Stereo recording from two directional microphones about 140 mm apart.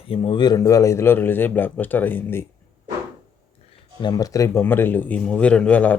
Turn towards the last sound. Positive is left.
turn(degrees=10)  # may be behind; listen again after turning